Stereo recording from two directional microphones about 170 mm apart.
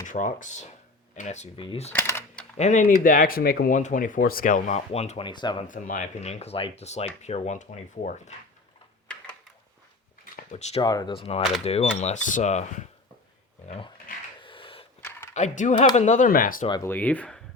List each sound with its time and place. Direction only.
0.0 s speech: 50° left (ahead or behind)
1.5 s speech: 35° left (ahead or behind)
1.9 s typing: 10° left (ahead or behind)
2.6 s speech: 45° left (ahead or behind)
3.0 s speech: 55° left (ahead or behind)
4.9 s speech: 35° left (ahead or behind)
5.6 s speech: 50° left (ahead or behind)
10.3 s a sound: 40° left (ahead or behind)
10.8 s speech: 25° left (ahead or behind)
14.4 s dog: 30° left (ahead or behind)
15.4 s speech: 45° left (ahead or behind)
16.8 s speech: 10° left (ahead or behind)